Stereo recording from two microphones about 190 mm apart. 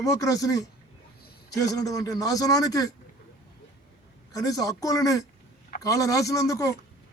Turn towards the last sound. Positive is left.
turn(degrees=15)  # may be behind; listen again after turning